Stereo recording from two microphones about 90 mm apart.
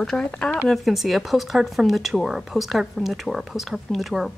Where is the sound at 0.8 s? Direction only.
Centre (ahead or behind).